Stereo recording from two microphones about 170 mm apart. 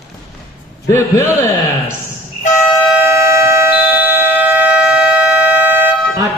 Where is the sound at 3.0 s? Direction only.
15° right (ahead or behind).